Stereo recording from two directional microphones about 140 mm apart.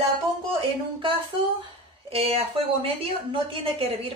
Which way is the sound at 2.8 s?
40° right (ahead or behind).